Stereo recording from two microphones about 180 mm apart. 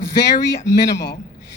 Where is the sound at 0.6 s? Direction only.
70° left (ahead or behind).